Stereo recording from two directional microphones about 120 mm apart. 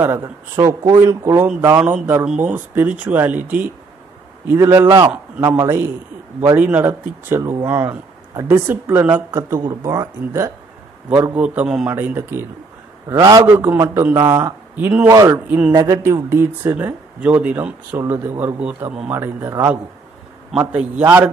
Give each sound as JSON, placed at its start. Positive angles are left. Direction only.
{"t": 0.2, "sound": "a man's voice", "side_deg": -30}
{"t": 1.7, "sound": "a man's voice", "side_deg": -10}
{"t": 9.6, "sound": "a man's voice", "side_deg": -30}
{"t": 11.3, "sound": "speech", "side_deg": -10}
{"t": 13.1, "sound": "a man's voice", "side_deg": -30}
{"t": 13.5, "sound": "speech", "side_deg": -15}
{"t": 14.1, "sound": "a man's voice", "side_deg": -30}
{"t": 14.8, "sound": "speech", "side_deg": -10}
{"t": 15.0, "sound": "a man's voice", "side_deg": -25}
{"t": 15.4, "sound": "speech", "side_deg": -15}
{"t": 15.7, "sound": "a man's voice", "side_deg": -30}
{"t": 16.0, "sound": "speech", "side_deg": -20}
{"t": 18.4, "sound": "speech", "side_deg": -15}
{"t": 20.5, "sound": "speech", "side_deg": -10}